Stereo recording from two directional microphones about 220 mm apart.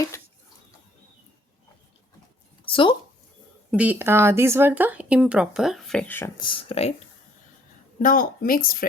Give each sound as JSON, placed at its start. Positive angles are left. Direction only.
{"t": 2.6, "sound": "speech", "side_deg": 25}
{"t": 3.7, "sound": "speech", "side_deg": -5}
{"t": 8.0, "sound": "speech", "side_deg": 40}